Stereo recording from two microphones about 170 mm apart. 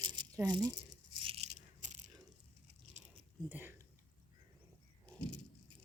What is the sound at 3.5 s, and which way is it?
Speech, 10° right (ahead or behind).